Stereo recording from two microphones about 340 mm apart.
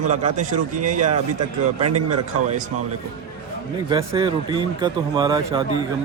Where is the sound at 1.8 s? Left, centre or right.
Right.